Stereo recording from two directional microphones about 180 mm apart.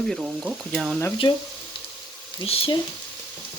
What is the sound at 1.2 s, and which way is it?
Frying, 25° left (ahead or behind).